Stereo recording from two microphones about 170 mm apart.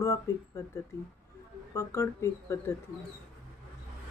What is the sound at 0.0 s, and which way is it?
Speech, 20° left (ahead or behind).